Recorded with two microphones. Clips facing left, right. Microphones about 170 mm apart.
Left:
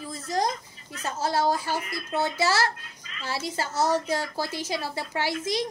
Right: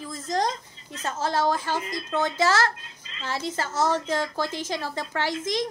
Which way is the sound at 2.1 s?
10° left (ahead or behind).